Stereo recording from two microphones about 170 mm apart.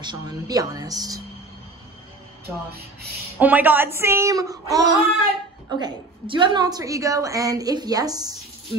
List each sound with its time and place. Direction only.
0.0 s a woman's voice: 25° right (ahead or behind)
2.4 s speech: 65° right (ahead or behind)
3.3 s a woman's voice: 10° right (ahead or behind)